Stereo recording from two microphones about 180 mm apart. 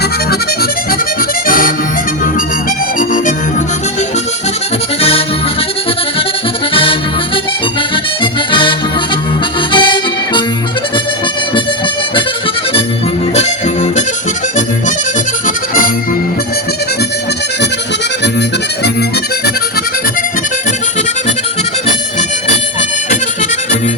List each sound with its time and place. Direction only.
1.5 s music: 50° left (ahead or behind)
8.2 s music: 25° left (ahead or behind)
9.7 s music: 25° left (ahead or behind)
15.4 s accordion: 50° left (ahead or behind)